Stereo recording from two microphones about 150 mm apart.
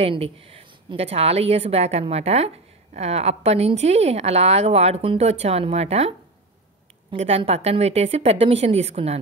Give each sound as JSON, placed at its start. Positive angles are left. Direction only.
{"t": 0.0, "sound": "a woman's voice", "side_deg": -40}